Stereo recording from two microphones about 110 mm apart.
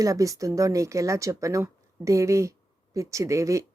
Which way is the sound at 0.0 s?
30° right (ahead or behind).